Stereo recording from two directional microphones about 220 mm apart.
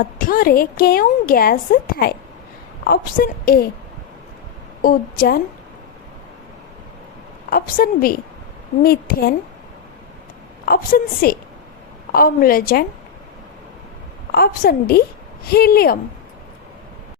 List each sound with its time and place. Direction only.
0.0 s a woman's voice: 40° left (ahead or behind)
4.8 s a woman's voice: 40° left (ahead or behind)
7.5 s a woman's voice: 40° left (ahead or behind)
10.7 s a woman's voice: 45° left (ahead or behind)
14.3 s a woman's voice: 45° left (ahead or behind)